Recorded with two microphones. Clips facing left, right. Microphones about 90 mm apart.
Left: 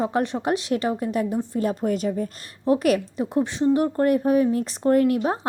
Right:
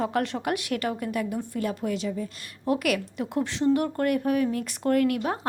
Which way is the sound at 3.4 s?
20° left (ahead or behind).